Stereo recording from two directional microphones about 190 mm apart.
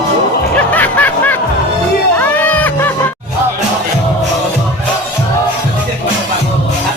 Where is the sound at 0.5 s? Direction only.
10° left (ahead or behind).